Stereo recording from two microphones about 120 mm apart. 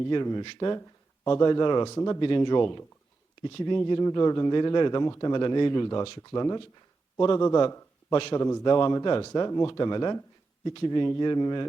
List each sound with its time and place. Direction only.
0.1 s speech: 35° left (ahead or behind)
2.2 s speech: 40° left (ahead or behind)
5.0 s speech: 25° left (ahead or behind)
5.3 s a man's voice: 35° left (ahead or behind)